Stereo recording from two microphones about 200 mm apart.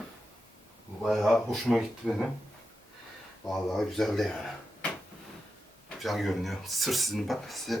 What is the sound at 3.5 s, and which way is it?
Speech, centre (ahead or behind).